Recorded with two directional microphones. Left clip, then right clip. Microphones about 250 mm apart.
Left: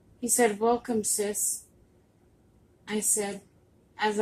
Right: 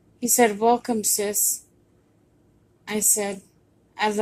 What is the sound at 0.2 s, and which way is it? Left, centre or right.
A woman's voice, right.